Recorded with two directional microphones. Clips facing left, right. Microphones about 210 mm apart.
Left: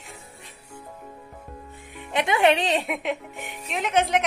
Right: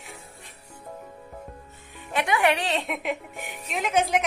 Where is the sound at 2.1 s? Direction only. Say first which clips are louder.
Left 3 dB; 20° left (ahead or behind).